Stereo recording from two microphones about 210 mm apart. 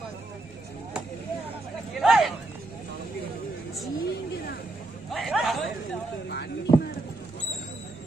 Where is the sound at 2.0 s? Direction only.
Centre (ahead or behind).